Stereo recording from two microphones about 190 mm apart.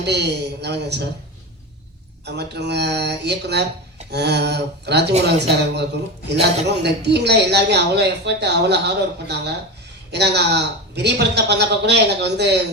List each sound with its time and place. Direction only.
0.0 s speech: 60° right (ahead or behind)
2.2 s speech: 60° right (ahead or behind)